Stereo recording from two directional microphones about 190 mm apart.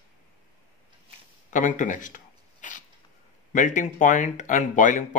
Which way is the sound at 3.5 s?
40° left (ahead or behind).